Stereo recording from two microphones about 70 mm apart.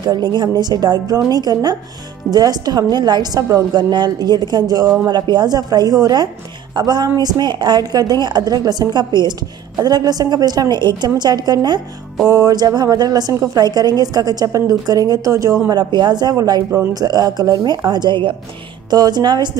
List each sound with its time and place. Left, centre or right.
0.0 s a woman's voice: right
3.7 s a woman's voice: right
5.0 s a woman's voice: right
6.7 s a woman's voice: right
9.8 s a woman's voice: right
12.3 s a woman's voice: right
12.5 s a woman's voice: right
13.3 s a woman's voice: right
13.7 s a woman's voice: right
15.7 s a woman's voice: right